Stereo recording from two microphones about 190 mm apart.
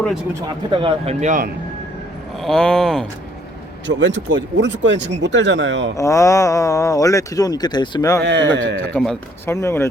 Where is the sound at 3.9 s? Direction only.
70° right (ahead or behind).